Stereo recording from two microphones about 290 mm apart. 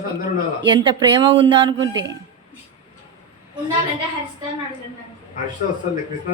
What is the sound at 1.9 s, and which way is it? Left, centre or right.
Speech, right.